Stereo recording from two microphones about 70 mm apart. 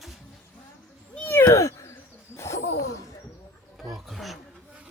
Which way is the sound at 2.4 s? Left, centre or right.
Left.